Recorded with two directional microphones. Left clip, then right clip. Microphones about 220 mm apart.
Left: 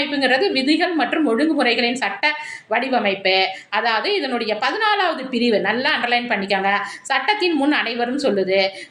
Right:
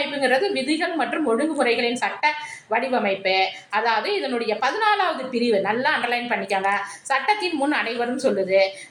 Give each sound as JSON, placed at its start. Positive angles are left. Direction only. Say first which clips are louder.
{"t": 0.2, "sound": "a woman's voice", "louder": "left 3 dB", "side_deg": 45}